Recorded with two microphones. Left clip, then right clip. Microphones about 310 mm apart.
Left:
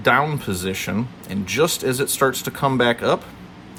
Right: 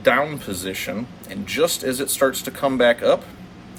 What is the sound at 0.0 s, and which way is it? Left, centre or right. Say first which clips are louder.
Speech: left 1 dB; centre.